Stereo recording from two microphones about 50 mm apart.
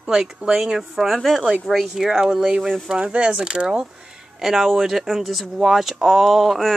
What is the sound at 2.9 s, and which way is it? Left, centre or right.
Speech, right.